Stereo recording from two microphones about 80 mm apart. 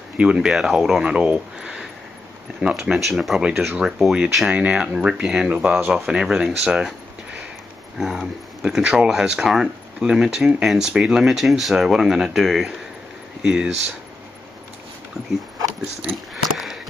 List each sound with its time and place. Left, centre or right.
0.2 s speech: centre
5.9 s speech: centre
8.0 s speech: centre
16.5 s a sound: centre